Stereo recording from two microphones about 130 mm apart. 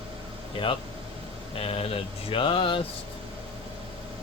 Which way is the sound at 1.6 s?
50° left (ahead or behind).